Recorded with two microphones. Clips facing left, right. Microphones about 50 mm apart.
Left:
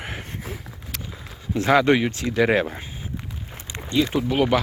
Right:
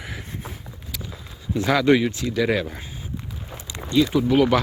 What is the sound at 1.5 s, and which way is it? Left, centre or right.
Speech, left.